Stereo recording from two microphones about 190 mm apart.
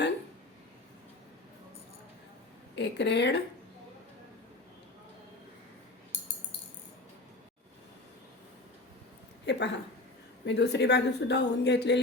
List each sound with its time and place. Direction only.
2.7 s a woman's voice: 65° left (ahead or behind)
9.5 s a woman's voice: 65° left (ahead or behind)